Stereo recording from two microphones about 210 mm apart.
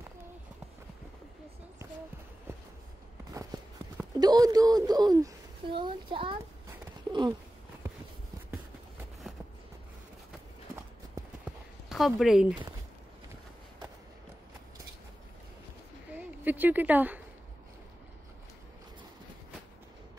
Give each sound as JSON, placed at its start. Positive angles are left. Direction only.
{"t": 4.2, "sound": "a child's voice", "side_deg": -20}
{"t": 7.1, "sound": "a sound", "side_deg": -20}
{"t": 11.9, "sound": "speech", "side_deg": 0}
{"t": 16.2, "sound": "a woman's voice", "side_deg": -10}